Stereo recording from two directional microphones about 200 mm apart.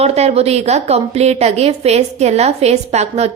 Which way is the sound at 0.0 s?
30° right (ahead or behind).